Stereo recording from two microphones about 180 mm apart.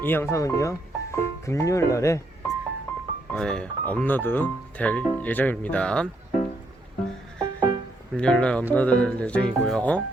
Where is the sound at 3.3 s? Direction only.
5° left (ahead or behind).